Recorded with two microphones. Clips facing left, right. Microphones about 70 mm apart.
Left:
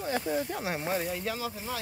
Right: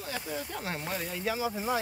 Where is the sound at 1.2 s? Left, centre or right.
Centre.